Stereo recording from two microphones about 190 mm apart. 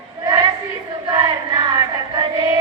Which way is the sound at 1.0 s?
20° right (ahead or behind).